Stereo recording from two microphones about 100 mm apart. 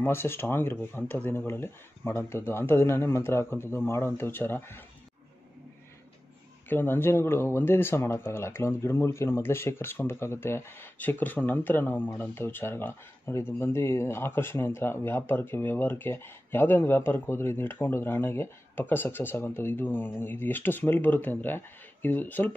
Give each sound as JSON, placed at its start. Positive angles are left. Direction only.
{"t": 0.0, "sound": "speech", "side_deg": 25}
{"t": 6.7, "sound": "speech", "side_deg": 20}